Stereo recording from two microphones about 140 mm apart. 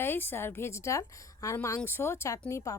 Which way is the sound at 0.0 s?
15° left (ahead or behind).